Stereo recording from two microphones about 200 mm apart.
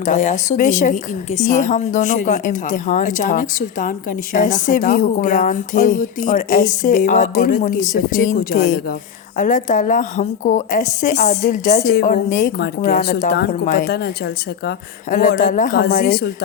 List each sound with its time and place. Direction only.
0.0 s speech: 40° left (ahead or behind)
11.3 s speech: 50° left (ahead or behind)
15.1 s speech: 40° left (ahead or behind)